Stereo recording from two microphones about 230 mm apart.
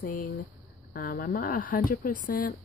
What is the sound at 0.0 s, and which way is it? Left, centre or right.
Speech, left.